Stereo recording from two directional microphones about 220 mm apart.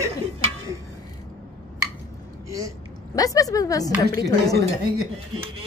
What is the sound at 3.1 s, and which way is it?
Speech, 15° left (ahead or behind).